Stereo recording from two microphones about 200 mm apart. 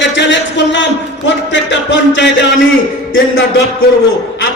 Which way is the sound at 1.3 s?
65° left (ahead or behind).